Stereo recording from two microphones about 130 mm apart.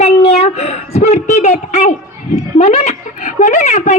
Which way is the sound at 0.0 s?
55° left (ahead or behind).